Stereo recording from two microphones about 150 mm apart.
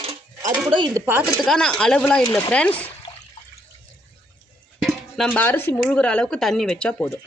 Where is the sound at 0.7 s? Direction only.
30° right (ahead or behind).